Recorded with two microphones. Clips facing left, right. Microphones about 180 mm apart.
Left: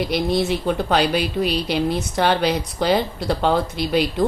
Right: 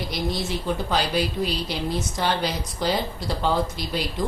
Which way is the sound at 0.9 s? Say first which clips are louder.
Left 4 dB; 65° left (ahead or behind).